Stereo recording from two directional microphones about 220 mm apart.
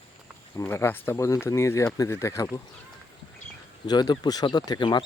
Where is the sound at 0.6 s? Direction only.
10° left (ahead or behind).